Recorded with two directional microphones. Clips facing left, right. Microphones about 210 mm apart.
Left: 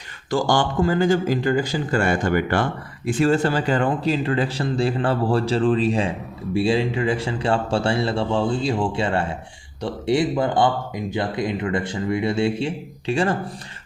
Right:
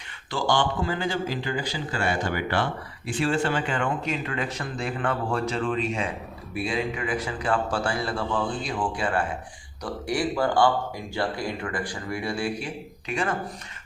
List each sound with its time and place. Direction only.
0.3 s speech: 45° left (ahead or behind)